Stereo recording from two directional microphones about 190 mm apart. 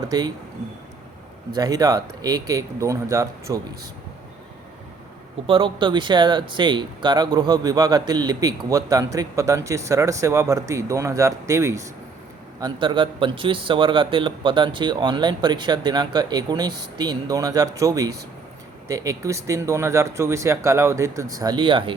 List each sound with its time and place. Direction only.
0.1 s a man's voice: 20° right (ahead or behind)
1.5 s a man's voice: 20° right (ahead or behind)
5.5 s a man's voice: 25° right (ahead or behind)